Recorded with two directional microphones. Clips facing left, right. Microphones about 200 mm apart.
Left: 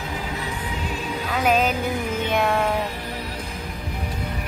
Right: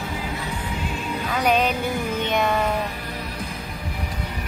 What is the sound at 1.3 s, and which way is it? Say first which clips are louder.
Speech: even; 5° left (ahead or behind).